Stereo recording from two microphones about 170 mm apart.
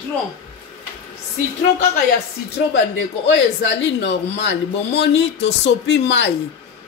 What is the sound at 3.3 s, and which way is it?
Speech, 90° left.